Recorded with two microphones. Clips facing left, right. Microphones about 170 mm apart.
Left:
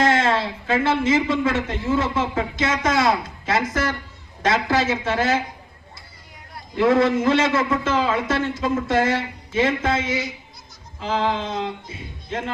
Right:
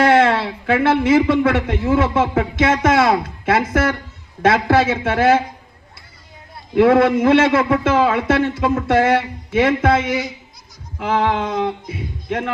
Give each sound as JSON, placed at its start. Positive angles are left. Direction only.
{"t": 0.0, "sound": "a man's voice", "side_deg": -60}
{"t": 6.7, "sound": "a man's voice", "side_deg": -60}